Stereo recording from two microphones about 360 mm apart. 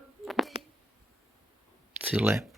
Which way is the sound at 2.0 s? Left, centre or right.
Centre.